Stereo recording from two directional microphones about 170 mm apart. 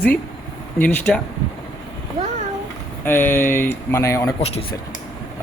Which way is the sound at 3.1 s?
10° left (ahead or behind).